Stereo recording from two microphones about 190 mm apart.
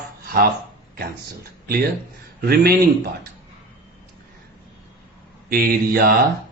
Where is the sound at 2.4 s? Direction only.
50° right (ahead or behind).